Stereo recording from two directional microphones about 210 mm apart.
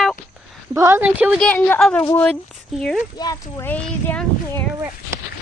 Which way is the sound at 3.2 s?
15° left (ahead or behind).